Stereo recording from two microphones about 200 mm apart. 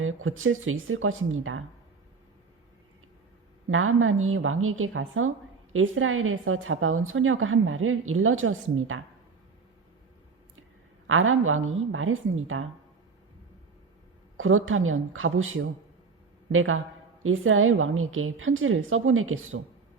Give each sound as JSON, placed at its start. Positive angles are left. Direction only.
{"t": 0.0, "sound": "a woman's voice", "side_deg": -90}
{"t": 3.7, "sound": "a woman's voice", "side_deg": -90}
{"t": 11.0, "sound": "a woman's voice", "side_deg": -85}
{"t": 14.3, "sound": "a woman's voice", "side_deg": -90}